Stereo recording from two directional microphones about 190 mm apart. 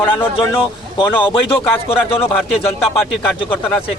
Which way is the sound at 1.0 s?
25° left (ahead or behind).